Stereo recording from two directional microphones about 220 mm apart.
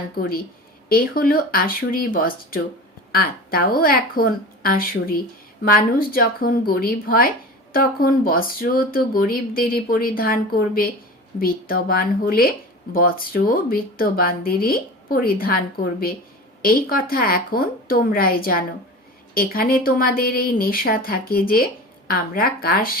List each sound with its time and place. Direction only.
0.2 s a woman's voice: 40° left (ahead or behind)